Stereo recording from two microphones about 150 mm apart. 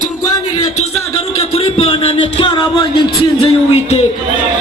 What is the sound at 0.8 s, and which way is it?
Speech, 45° left (ahead or behind).